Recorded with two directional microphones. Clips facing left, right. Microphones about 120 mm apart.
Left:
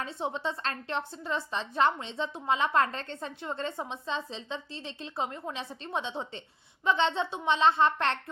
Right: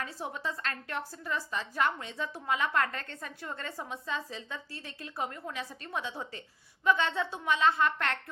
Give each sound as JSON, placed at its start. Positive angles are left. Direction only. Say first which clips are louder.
{"t": 0.0, "sound": "a woman's voice", "louder": "left 4 dB", "side_deg": 25}